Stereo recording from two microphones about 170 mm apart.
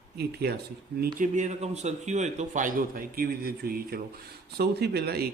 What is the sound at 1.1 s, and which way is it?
A man's voice, 45° right (ahead or behind).